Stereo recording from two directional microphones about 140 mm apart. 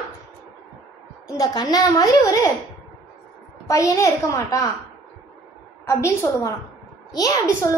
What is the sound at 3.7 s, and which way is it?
A woman's voice, 20° left (ahead or behind).